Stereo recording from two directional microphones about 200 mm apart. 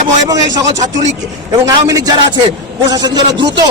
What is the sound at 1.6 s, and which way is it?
A man's voice, 15° right (ahead or behind).